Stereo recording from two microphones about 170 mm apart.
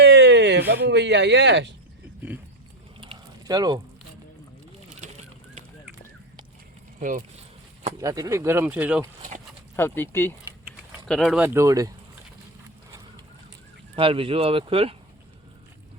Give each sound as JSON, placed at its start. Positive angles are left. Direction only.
{"t": 0.0, "sound": "a sound", "side_deg": -90}
{"t": 0.7, "sound": "speech", "side_deg": -90}
{"t": 3.0, "sound": "a sound", "side_deg": -25}
{"t": 4.9, "sound": "bird", "side_deg": -40}
{"t": 7.0, "sound": "speech", "side_deg": -50}
{"t": 8.0, "sound": "speech", "side_deg": -20}
{"t": 9.7, "sound": "speech", "side_deg": 15}
{"t": 11.1, "sound": "speech", "side_deg": 0}
{"t": 11.4, "sound": "speech", "side_deg": -15}
{"t": 13.9, "sound": "speech", "side_deg": -35}